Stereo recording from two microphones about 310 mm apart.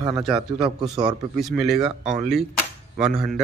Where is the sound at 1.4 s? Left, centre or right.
Centre.